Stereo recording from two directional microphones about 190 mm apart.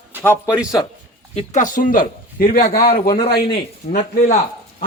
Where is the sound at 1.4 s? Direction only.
40° left (ahead or behind).